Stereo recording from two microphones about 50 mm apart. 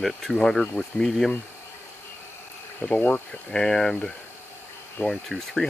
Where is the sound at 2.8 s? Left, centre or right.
Left.